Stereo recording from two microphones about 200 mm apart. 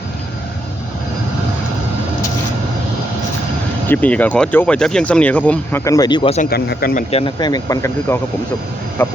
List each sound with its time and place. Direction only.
3.8 s speech: 10° left (ahead or behind); by 6.4 s 25° left (ahead or behind)
6.4 s speech: 50° left (ahead or behind)
7.1 s speech: 25° left (ahead or behind); by 9.1 s 10° left (ahead or behind)